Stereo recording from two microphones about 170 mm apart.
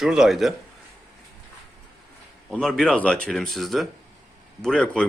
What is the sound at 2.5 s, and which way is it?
Speech, centre (ahead or behind).